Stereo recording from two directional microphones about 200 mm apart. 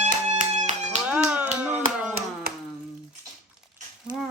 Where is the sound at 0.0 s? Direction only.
35° right (ahead or behind).